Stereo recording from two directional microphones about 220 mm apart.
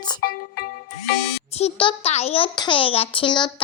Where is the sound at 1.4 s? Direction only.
30° left (ahead or behind).